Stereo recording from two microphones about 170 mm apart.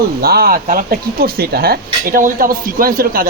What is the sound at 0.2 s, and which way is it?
Speech, 65° right (ahead or behind).